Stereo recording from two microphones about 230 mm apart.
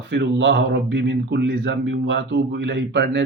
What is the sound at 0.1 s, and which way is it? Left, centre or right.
Speech, right.